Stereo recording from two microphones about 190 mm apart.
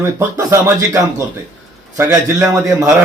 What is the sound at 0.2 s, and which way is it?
A man's voice, 15° right (ahead or behind).